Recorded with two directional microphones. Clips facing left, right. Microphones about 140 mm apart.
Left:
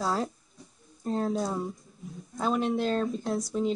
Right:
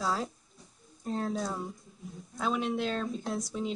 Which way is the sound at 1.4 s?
Centre (ahead or behind).